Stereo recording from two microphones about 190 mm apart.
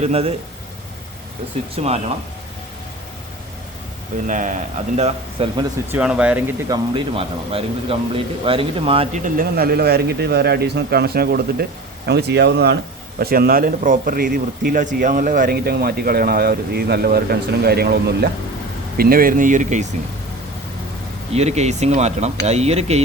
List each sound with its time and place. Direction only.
0.0 s speech: 30° right (ahead or behind)
1.7 s speech: 35° right (ahead or behind)
4.3 s a man's voice: 40° right (ahead or behind)
4.9 s speech: 30° right (ahead or behind)
5.9 s speech: 5° right (ahead or behind)
6.7 s speech: 25° right (ahead or behind)
9.2 s a man's voice: 50° right (ahead or behind)
21.3 s speech: 35° right (ahead or behind)